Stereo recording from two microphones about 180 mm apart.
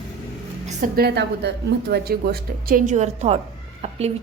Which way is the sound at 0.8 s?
60° right (ahead or behind).